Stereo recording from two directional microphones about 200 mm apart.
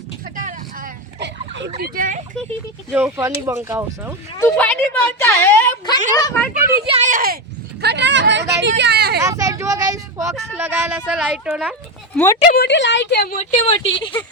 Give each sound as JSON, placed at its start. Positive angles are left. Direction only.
{"t": 0.3, "sound": "vehicle", "side_deg": -40}
{"t": 1.2, "sound": "a sound", "side_deg": -60}
{"t": 1.8, "sound": "speech", "side_deg": -40}
{"t": 2.9, "sound": "speech", "side_deg": -10}
{"t": 4.4, "sound": "a sound", "side_deg": 10}
{"t": 6.1, "sound": "speech", "side_deg": 15}
{"t": 6.8, "sound": "speech", "side_deg": -30}
{"t": 7.1, "sound": "speech", "side_deg": -45}
{"t": 7.8, "sound": "a sound", "side_deg": -55}
{"t": 9.2, "sound": "speech", "side_deg": -15}
{"t": 12.1, "sound": "speech", "side_deg": 10}
{"t": 12.5, "sound": "a woman's voice", "side_deg": 55}
{"t": 13.4, "sound": "a woman's voice", "side_deg": 30}